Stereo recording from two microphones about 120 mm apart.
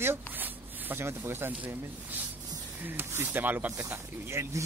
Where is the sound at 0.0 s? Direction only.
15° right (ahead or behind).